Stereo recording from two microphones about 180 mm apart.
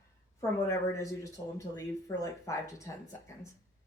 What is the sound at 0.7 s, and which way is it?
Speech, 15° left (ahead or behind).